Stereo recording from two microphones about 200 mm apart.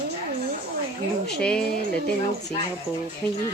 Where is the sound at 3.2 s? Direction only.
5° left (ahead or behind).